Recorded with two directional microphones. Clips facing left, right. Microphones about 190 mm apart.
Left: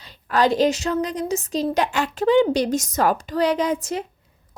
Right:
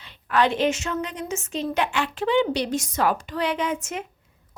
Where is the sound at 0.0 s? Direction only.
40° left (ahead or behind).